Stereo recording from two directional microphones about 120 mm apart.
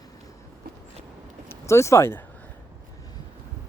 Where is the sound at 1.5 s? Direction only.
25° left (ahead or behind).